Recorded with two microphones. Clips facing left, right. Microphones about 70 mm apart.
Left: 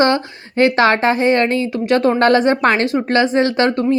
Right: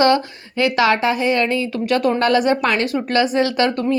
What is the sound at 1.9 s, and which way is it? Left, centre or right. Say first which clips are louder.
Speech: left 4 dB; left.